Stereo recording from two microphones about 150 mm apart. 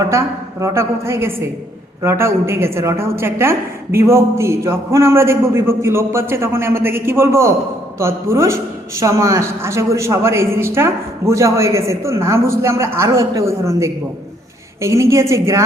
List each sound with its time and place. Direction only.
0.1 s a man's voice: 20° right (ahead or behind)